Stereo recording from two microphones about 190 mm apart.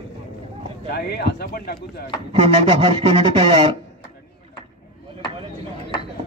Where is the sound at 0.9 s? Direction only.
60° left (ahead or behind).